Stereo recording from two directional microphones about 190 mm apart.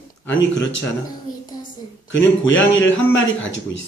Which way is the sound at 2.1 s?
75° left (ahead or behind).